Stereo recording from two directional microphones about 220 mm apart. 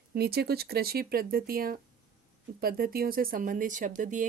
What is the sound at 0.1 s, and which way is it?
Speech, 45° right (ahead or behind).